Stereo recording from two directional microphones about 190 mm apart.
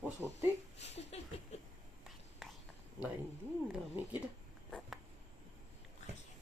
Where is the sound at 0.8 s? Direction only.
35° left (ahead or behind).